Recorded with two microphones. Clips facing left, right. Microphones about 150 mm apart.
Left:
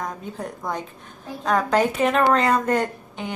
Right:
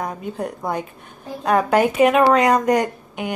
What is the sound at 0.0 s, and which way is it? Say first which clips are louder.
A woman's voice: right 4 dB; 15° right (ahead or behind).